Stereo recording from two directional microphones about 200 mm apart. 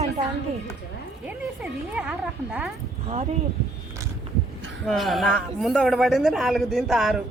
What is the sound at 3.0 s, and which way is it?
Speech, 30° right (ahead or behind).